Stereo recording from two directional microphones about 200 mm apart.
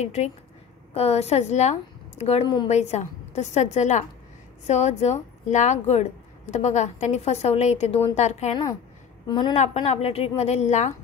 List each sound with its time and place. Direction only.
0.0 s a woman's voice: 35° left (ahead or behind)
9.3 s a woman's voice: 25° left (ahead or behind)